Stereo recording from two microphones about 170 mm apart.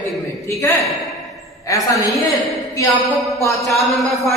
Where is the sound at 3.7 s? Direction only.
Centre (ahead or behind).